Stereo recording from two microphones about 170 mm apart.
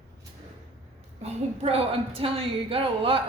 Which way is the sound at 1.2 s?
35° right (ahead or behind).